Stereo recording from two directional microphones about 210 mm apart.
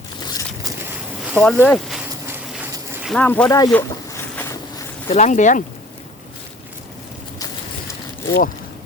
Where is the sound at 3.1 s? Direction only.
5° left (ahead or behind).